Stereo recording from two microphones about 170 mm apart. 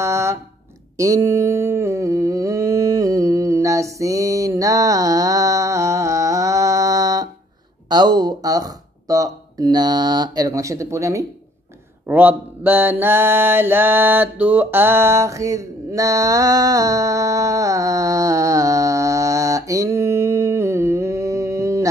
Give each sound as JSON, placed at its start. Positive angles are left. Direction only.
{"t": 0.0, "sound": "a sound", "side_deg": -15}
{"t": 7.9, "sound": "speech", "side_deg": -25}
{"t": 12.1, "sound": "mantra", "side_deg": -10}